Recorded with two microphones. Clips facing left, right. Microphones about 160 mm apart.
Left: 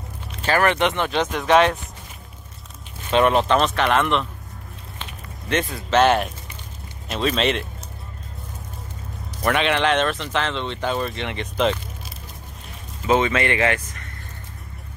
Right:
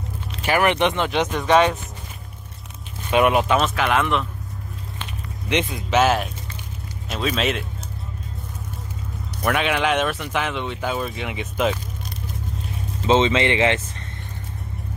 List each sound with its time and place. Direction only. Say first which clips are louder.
0.5 s speech: even; 15° right (ahead or behind)
1.3 s speech: left 1 dB; centre (ahead or behind)
3.1 s speech: even; 10° right (ahead or behind)
5.5 s speech: even; 20° right (ahead or behind)
5.9 s speech: left 2 dB; centre (ahead or behind)
9.4 s speech: left 1 dB; 5° right (ahead or behind)
13.0 s speech: right 2 dB; 25° right (ahead or behind)